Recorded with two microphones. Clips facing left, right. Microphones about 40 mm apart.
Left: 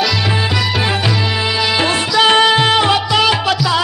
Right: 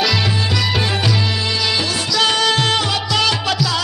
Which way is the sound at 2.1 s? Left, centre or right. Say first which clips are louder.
Left 5 dB; left.